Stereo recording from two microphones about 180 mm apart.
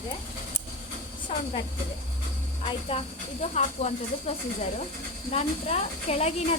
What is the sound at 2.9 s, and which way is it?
Speech, 30° left (ahead or behind).